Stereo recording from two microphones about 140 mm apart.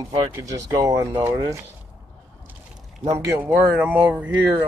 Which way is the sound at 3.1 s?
25° right (ahead or behind).